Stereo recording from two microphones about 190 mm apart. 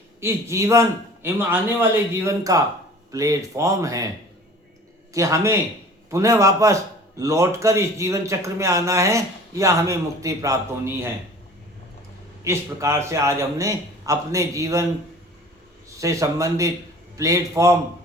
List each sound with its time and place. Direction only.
0.2 s speech: 15° right (ahead or behind)
5.1 s speech: 15° right (ahead or behind)
12.5 s speech: 15° right (ahead or behind)
16.0 s speech: 15° right (ahead or behind)